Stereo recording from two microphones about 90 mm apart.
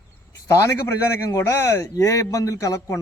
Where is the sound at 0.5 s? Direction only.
35° left (ahead or behind).